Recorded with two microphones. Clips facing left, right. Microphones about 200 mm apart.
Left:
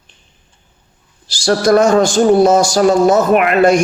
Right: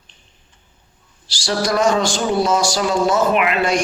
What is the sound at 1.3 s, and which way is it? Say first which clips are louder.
Speech: left 9 dB; 50° left (ahead or behind).